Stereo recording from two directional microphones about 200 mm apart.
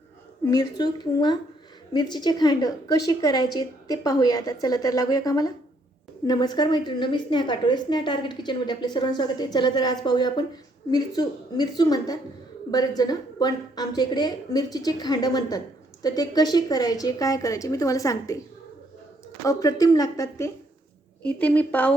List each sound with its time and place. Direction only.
0.5 s a woman's voice: 20° left (ahead or behind)
19.5 s speech: 15° left (ahead or behind)